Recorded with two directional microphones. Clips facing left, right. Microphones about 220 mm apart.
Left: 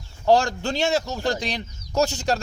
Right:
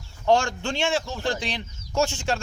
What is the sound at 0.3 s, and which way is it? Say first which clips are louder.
A man's voice: left 2 dB; 35° left (ahead or behind).